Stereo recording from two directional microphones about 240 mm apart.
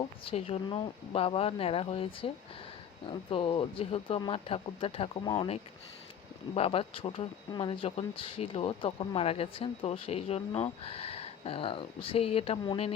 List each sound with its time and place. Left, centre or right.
0.0 s speech: left